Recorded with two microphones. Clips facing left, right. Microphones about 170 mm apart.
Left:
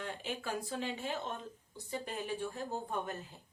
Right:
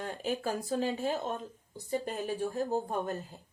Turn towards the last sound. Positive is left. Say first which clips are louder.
# right 6 dB
turn(degrees=-40)  # may be behind; listen again after turning